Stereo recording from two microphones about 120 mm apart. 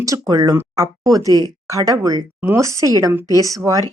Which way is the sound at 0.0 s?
30° right (ahead or behind).